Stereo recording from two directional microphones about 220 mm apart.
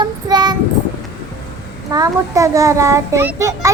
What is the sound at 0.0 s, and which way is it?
Child singing, 20° right (ahead or behind).